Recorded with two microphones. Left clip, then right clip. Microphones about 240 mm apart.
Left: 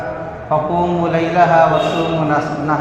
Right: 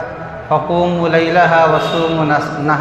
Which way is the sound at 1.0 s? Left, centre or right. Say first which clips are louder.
Right 3 dB; right.